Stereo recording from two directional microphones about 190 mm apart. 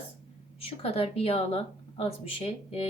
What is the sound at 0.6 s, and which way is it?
A woman's voice, 30° left (ahead or behind).